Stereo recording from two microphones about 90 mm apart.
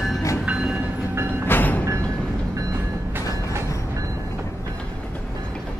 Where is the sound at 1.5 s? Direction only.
20° left (ahead or behind).